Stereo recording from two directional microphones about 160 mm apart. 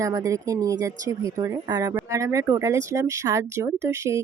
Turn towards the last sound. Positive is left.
turn(degrees=-20)  # may be behind; listen again after turning